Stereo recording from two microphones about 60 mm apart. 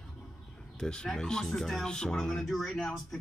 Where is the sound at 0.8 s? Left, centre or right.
Centre.